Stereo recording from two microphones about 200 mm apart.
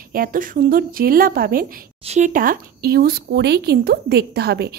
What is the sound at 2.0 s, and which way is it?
Speech, 35° right (ahead or behind).